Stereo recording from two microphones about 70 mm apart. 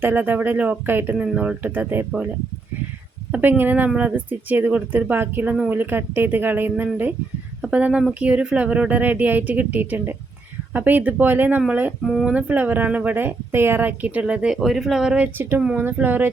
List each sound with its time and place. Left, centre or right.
0.0 s speech: right
3.6 s speech: right; by 15.2 s centre
15.4 s speech: right